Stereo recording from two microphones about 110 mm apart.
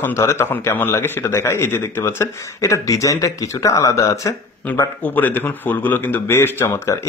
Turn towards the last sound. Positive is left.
turn(degrees=25)  # may be behind; listen again after turning